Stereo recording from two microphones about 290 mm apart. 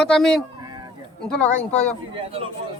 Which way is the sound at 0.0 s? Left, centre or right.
Centre.